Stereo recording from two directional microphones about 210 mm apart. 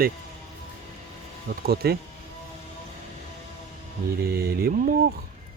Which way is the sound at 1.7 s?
45° right (ahead or behind).